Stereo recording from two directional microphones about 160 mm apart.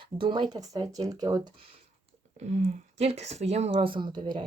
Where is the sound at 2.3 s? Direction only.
45° right (ahead or behind); by 4.5 s 30° right (ahead or behind).